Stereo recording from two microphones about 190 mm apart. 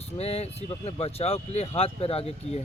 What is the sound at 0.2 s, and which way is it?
Speech, 30° left (ahead or behind).